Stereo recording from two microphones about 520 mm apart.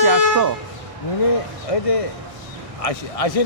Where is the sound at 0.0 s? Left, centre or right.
Right.